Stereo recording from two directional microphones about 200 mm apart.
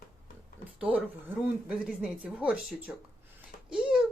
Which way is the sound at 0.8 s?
5° right (ahead or behind).